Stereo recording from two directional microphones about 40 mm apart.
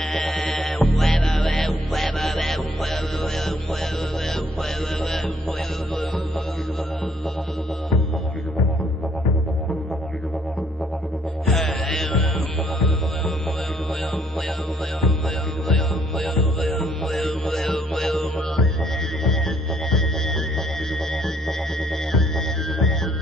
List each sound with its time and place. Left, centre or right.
0.1 s music: left
0.7 s music: centre
1.1 s music: left
1.4 s music: centre
11.4 s music: centre
15.7 s music: centre